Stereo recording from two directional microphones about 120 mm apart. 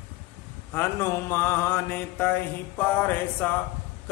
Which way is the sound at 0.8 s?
20° left (ahead or behind).